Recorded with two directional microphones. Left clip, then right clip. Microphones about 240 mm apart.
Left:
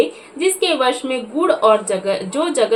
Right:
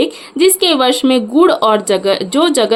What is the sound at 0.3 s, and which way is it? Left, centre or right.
A woman's voice, right.